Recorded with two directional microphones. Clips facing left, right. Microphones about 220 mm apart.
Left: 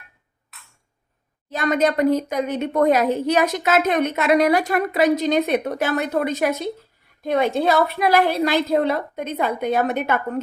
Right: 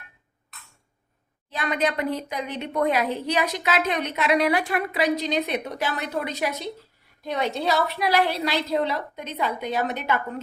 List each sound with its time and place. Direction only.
1.5 s a woman's voice: 45° left (ahead or behind)